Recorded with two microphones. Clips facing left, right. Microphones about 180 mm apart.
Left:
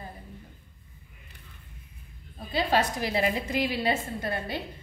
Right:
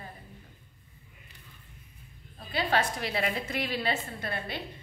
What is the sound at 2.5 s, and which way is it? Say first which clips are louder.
A woman's voice: left 3 dB; 20° left (ahead or behind).